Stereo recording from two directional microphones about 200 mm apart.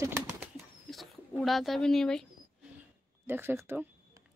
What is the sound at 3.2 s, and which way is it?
Speech, 10° right (ahead or behind).